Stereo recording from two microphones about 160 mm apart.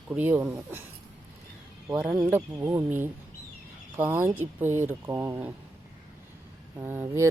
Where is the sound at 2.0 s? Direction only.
10° right (ahead or behind).